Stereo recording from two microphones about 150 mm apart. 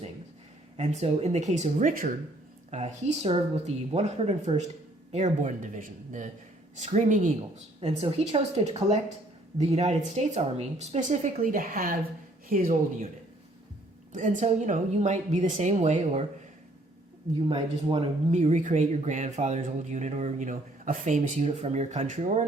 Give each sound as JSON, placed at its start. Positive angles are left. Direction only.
{"t": 0.8, "sound": "speech", "side_deg": -50}
{"t": 7.8, "sound": "speech", "side_deg": -40}
{"t": 11.4, "sound": "speech", "side_deg": -65}
{"t": 14.1, "sound": "speech", "side_deg": -55}
{"t": 17.8, "sound": "speech", "side_deg": -40}